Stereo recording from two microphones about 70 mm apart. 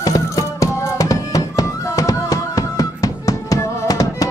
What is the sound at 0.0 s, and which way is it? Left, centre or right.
Music, left.